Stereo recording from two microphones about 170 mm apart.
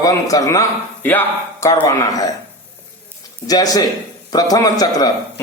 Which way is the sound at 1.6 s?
20° left (ahead or behind).